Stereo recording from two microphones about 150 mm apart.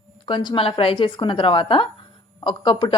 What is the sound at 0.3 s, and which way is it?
A woman's voice, 30° left (ahead or behind).